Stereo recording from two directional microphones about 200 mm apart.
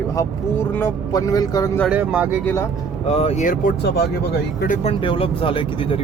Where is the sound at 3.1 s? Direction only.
30° left (ahead or behind); by 4.1 s 55° left (ahead or behind).